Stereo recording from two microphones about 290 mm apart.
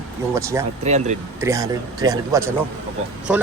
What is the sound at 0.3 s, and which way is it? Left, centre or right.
Speech, centre.